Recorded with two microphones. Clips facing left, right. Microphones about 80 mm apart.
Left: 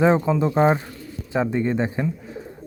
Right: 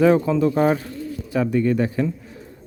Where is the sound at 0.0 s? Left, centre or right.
Left.